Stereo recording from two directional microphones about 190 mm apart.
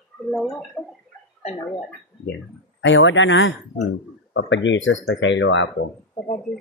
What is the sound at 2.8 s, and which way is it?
Speech, 80° left.